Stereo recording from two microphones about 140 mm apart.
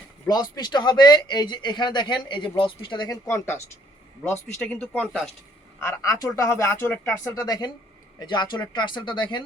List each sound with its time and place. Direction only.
0.3 s speech: 30° left (ahead or behind)
3.2 s speech: 20° left (ahead or behind)
4.5 s speech: 5° left (ahead or behind)
5.8 s speech: 20° left (ahead or behind)
7.3 s speech: 30° left (ahead or behind)